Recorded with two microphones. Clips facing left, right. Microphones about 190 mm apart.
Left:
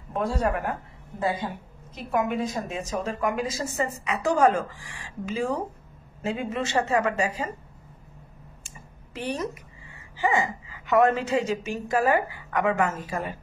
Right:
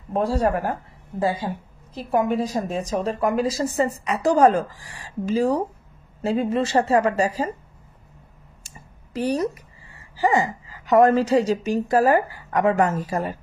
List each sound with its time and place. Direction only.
0.1 s a woman's voice: 35° right (ahead or behind)
8.6 s a sound: 40° right (ahead or behind)
10.1 s a woman's voice: 35° right (ahead or behind)